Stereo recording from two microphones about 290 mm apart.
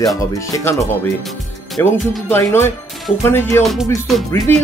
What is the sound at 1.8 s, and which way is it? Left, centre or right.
Speech, centre.